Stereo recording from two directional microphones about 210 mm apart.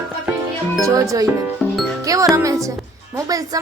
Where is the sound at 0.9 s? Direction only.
15° right (ahead or behind).